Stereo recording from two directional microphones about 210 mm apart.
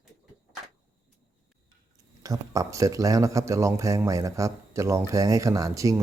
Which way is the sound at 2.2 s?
15° right (ahead or behind).